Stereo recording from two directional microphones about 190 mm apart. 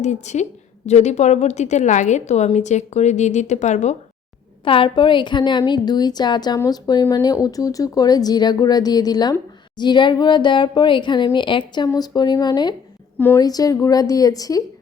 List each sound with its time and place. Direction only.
0.0 s a woman's voice: 40° left (ahead or behind)
4.6 s a woman's voice: 25° left (ahead or behind)